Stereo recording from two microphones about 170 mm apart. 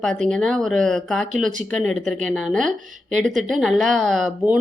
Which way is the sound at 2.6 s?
45° right (ahead or behind).